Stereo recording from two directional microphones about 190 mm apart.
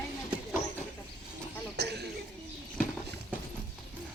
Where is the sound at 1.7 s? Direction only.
60° right (ahead or behind).